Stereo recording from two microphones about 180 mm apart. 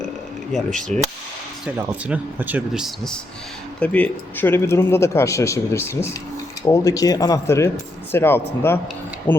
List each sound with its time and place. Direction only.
0.5 s speech: centre (ahead or behind)